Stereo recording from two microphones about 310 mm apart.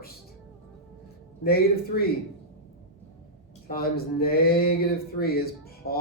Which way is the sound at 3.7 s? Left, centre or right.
Left.